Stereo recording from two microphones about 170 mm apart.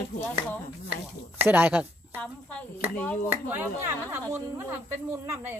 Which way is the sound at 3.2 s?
10° right (ahead or behind).